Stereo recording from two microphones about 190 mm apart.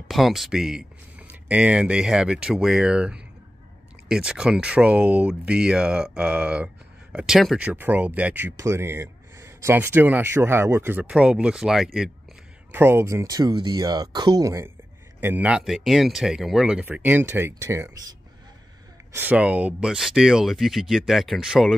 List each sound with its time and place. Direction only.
0.1 s speech: centre (ahead or behind)
12.7 s speech: 10° right (ahead or behind)
19.1 s speech: 10° right (ahead or behind)